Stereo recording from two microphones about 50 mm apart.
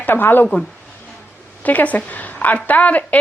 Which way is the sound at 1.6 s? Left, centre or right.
Left.